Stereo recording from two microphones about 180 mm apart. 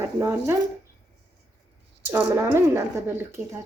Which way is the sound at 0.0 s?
15° right (ahead or behind).